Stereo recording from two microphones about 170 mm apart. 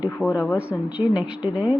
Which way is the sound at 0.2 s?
Centre (ahead or behind).